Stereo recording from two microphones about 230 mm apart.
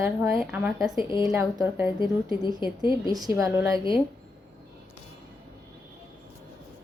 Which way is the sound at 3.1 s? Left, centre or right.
Centre.